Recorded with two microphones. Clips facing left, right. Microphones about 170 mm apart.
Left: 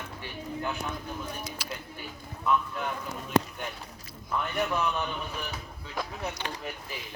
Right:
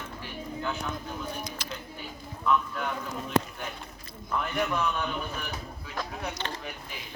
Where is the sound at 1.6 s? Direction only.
10° left (ahead or behind).